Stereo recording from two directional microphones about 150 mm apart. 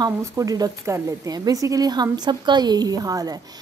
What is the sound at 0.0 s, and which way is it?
Speech, 25° right (ahead or behind).